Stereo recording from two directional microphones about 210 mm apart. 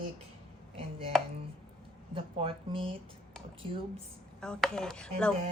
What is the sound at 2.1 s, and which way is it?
Speech, 25° right (ahead or behind).